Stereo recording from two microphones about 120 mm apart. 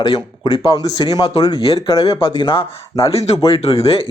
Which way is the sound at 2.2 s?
45° left (ahead or behind).